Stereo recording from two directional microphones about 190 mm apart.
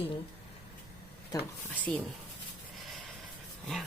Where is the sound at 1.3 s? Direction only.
20° left (ahead or behind).